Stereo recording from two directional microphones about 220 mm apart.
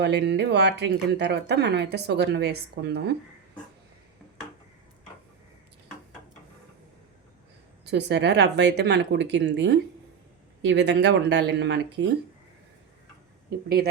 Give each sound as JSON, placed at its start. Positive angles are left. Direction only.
{"t": 0.0, "sound": "speech", "side_deg": -50}
{"t": 7.9, "sound": "speech", "side_deg": -50}